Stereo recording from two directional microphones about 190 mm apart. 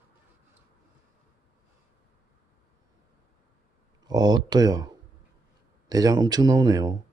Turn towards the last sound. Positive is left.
turn(degrees=-20)  # may be behind; listen again after turning